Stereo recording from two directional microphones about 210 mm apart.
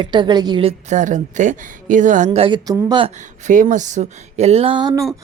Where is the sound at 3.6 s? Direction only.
35° right (ahead or behind); by 5.1 s 20° right (ahead or behind).